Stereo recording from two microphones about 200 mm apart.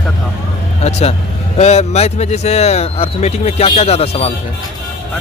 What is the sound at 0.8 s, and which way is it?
Speech, 30° left (ahead or behind).